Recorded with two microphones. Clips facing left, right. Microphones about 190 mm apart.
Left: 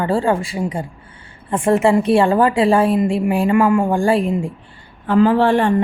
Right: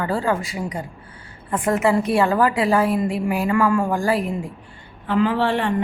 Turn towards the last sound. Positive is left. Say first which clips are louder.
# left 6 dB
turn(degrees=45)  # may be behind; listen again after turning